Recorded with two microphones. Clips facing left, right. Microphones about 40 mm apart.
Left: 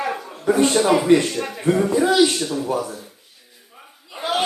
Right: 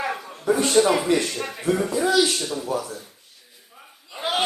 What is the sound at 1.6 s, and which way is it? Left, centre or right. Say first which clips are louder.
Speech: left 4 dB; left.